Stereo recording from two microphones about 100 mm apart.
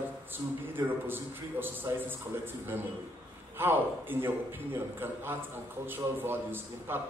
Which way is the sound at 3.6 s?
20° right (ahead or behind).